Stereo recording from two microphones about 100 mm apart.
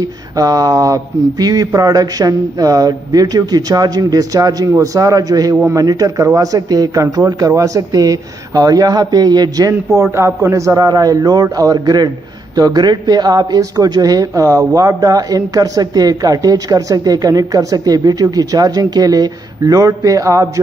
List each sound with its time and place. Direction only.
0.4 s speech: 40° right (ahead or behind)
10.1 s speech: 25° right (ahead or behind)